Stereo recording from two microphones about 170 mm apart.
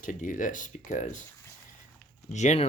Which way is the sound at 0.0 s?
50° left (ahead or behind).